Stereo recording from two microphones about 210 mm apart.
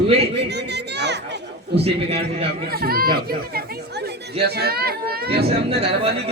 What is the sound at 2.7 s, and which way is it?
Speech, 45° right (ahead or behind).